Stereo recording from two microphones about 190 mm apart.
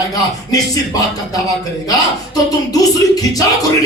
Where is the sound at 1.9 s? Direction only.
20° left (ahead or behind).